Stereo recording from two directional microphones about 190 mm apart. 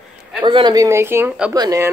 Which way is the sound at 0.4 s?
25° right (ahead or behind).